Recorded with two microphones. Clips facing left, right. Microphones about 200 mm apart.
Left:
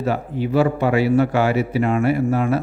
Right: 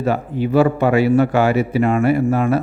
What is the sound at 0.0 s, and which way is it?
Speech, 50° right (ahead or behind).